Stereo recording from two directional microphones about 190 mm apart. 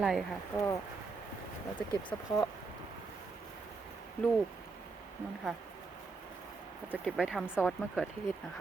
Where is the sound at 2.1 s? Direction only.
20° left (ahead or behind).